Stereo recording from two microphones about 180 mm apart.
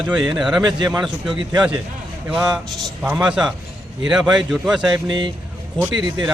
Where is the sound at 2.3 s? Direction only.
5° right (ahead or behind).